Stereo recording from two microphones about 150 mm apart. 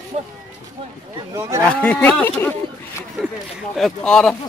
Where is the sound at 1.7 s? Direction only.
5° left (ahead or behind).